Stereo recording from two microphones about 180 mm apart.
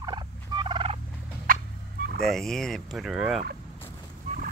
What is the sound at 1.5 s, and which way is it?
Turkey, 50° right (ahead or behind).